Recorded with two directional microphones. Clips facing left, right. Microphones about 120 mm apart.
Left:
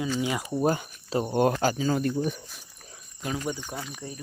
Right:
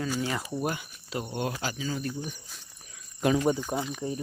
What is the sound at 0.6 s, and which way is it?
Speech, 35° left (ahead or behind).